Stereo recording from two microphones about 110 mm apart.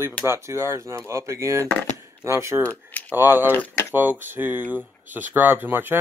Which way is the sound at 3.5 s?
20° left (ahead or behind).